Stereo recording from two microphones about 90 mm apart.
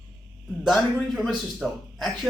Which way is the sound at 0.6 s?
Centre (ahead or behind).